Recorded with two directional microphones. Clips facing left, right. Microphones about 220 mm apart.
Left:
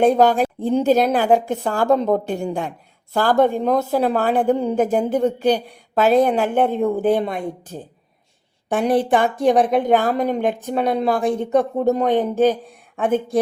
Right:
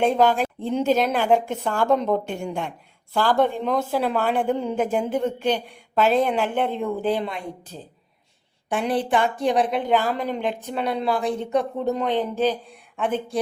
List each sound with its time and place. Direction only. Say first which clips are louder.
0.0 s a woman's voice: left 4 dB; 40° left (ahead or behind)